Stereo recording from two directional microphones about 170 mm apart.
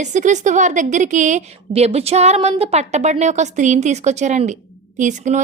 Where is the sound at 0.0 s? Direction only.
45° right (ahead or behind).